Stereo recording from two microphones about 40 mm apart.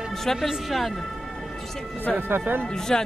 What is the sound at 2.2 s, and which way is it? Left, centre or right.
Speech, right.